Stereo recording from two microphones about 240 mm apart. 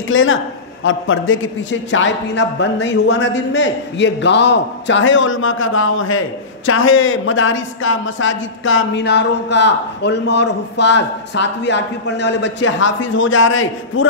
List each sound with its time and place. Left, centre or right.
0.1 s a man's voice: left